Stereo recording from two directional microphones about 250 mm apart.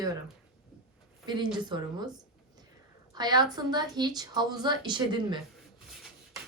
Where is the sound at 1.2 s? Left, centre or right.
Centre.